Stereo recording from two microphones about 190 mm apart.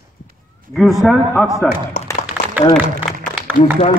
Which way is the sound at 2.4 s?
10° right (ahead or behind).